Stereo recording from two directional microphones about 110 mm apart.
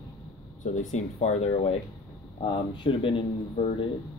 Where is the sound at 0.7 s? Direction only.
90° left; by 1.7 s 70° left (ahead or behind).